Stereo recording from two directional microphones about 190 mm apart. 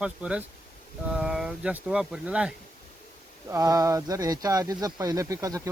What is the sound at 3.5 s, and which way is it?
Speech, 20° right (ahead or behind).